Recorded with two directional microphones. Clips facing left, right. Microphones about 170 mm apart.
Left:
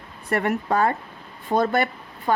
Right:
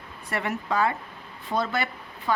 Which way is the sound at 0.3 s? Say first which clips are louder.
Left 6 dB; 50° left (ahead or behind).